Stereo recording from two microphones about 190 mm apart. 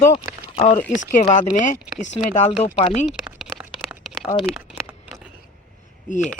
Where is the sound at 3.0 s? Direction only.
Centre (ahead or behind).